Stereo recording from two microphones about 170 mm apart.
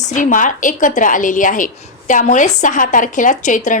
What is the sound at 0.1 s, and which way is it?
A woman's voice, 50° left (ahead or behind).